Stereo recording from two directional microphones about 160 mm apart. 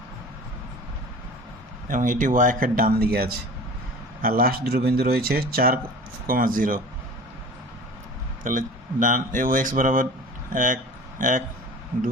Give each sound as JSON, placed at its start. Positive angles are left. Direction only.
{"t": 1.9, "sound": "speech", "side_deg": -55}
{"t": 8.4, "sound": "speech", "side_deg": -55}